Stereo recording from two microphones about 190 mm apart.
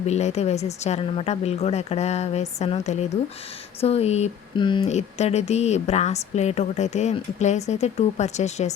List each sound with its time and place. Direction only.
0.1 s speech: 35° left (ahead or behind)
4.9 s speech: 35° left (ahead or behind)